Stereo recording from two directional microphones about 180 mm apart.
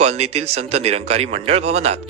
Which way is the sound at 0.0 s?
35° right (ahead or behind).